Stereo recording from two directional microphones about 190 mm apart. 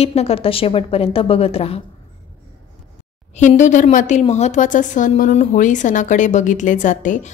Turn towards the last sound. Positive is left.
turn(degrees=40)  # may be behind; listen again after turning